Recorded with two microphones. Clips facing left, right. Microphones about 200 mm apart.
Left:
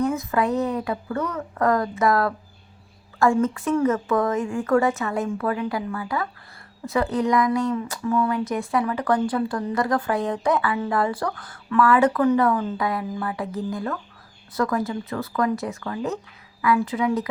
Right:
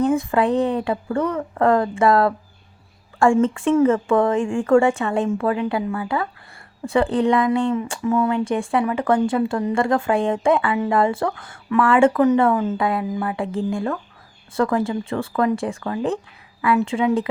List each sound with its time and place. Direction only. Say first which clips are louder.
0.0 s speech: right 4 dB; 30° right (ahead or behind)